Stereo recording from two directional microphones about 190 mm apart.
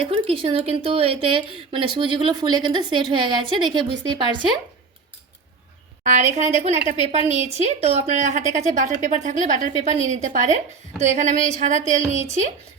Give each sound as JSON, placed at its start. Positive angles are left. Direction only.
{"t": 0.0, "sound": "speech", "side_deg": -30}
{"t": 6.0, "sound": "a woman's voice", "side_deg": -40}